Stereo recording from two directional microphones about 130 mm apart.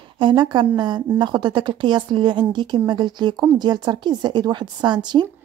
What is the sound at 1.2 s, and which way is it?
A woman's voice, 35° right (ahead or behind).